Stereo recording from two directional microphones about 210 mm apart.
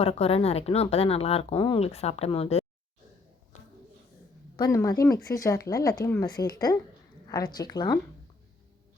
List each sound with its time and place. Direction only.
0.0 s speech: 30° left (ahead or behind)
4.5 s speech: 15° left (ahead or behind)